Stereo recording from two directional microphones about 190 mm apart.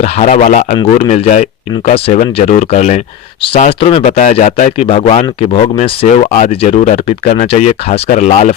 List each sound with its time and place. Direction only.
0.0 s speech: 35° left (ahead or behind)